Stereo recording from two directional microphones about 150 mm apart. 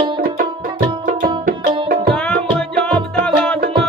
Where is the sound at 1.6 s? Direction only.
35° right (ahead or behind).